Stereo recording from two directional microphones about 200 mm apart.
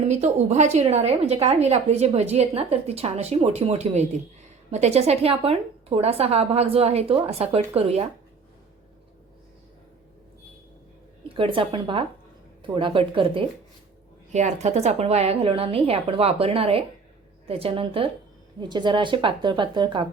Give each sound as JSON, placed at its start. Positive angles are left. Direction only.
{"t": 0.1, "sound": "a woman's voice", "side_deg": -35}
{"t": 11.3, "sound": "a woman's voice", "side_deg": -25}